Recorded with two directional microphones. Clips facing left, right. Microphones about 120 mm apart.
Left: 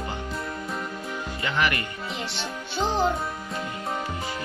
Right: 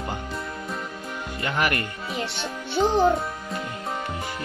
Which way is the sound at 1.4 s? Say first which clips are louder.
Right 1 dB; 50° right (ahead or behind).